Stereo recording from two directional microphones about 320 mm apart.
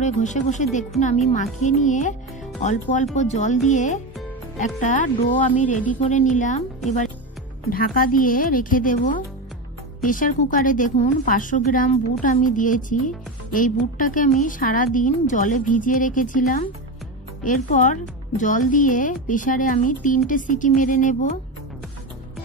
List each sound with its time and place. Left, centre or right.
0.0 s a woman's voice: left
7.7 s a woman's voice: left